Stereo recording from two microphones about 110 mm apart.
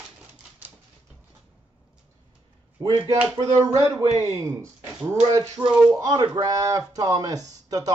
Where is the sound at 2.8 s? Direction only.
30° right (ahead or behind).